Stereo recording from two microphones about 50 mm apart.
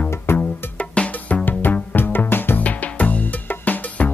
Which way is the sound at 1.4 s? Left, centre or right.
Left.